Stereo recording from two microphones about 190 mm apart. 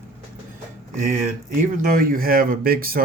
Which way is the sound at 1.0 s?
45° right (ahead or behind).